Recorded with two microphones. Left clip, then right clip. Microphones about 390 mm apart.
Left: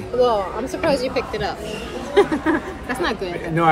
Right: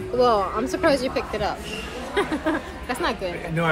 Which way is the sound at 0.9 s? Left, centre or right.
Right.